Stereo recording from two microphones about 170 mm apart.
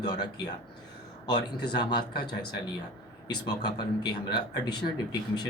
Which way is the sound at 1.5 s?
25° left (ahead or behind).